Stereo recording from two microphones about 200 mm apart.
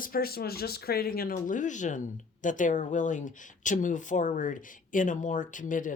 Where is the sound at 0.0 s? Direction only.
45° left (ahead or behind).